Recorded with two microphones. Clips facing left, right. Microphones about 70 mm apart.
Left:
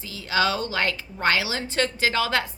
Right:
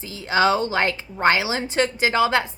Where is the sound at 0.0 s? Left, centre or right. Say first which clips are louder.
Right 4 dB; right.